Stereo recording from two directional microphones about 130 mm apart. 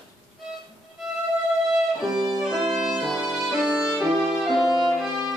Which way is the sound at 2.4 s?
Centre (ahead or behind).